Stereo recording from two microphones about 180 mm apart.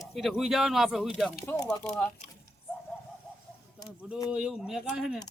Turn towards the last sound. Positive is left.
turn(degrees=-5)  # may be behind; listen again after turning